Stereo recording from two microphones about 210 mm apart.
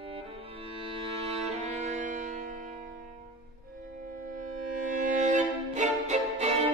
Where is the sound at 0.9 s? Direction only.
25° right (ahead or behind).